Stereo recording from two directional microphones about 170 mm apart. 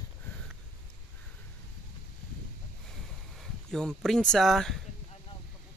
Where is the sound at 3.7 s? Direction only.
Centre (ahead or behind).